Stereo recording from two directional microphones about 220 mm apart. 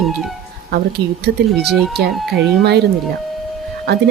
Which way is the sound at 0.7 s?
50° right (ahead or behind).